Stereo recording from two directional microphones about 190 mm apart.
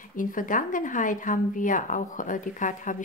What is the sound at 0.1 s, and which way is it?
A woman's voice, 45° left (ahead or behind).